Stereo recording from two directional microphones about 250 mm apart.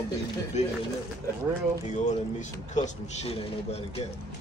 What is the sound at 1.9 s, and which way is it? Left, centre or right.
Speech, left.